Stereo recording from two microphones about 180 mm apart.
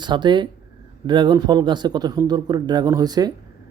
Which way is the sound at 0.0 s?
25° right (ahead or behind).